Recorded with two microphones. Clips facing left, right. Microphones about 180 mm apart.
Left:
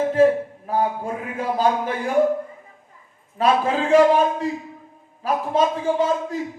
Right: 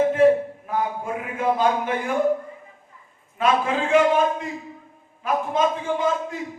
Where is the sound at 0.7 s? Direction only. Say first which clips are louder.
Left 3 dB; 35° left (ahead or behind).